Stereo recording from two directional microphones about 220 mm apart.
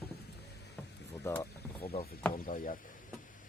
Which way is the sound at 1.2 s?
10° left (ahead or behind).